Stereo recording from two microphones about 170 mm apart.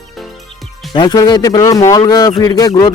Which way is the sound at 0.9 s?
25° left (ahead or behind).